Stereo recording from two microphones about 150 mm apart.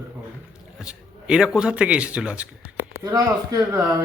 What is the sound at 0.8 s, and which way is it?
Speech, 5° right (ahead or behind).